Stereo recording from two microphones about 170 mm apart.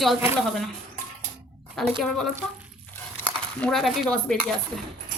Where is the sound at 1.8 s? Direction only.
Centre (ahead or behind).